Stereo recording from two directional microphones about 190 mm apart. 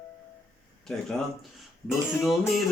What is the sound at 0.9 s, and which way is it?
Music, centre (ahead or behind).